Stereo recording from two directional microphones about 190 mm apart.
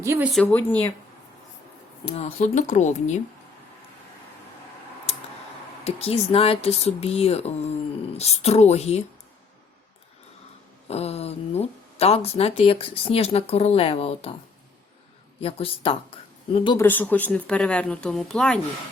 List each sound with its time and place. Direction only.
0.0 s speech: 15° right (ahead or behind)
0.4 s speech: 10° left (ahead or behind)
2.0 s speech: 30° left (ahead or behind)
5.8 s speech: 30° left (ahead or behind)
10.8 s speech: 35° left (ahead or behind)
15.4 s speech: 30° left (ahead or behind)
16.7 s speech: 10° left (ahead or behind)